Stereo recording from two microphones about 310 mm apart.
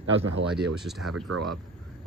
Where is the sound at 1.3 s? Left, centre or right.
Right.